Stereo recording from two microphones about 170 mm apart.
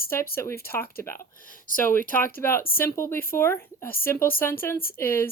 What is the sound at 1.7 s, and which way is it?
Speech, 55° left (ahead or behind).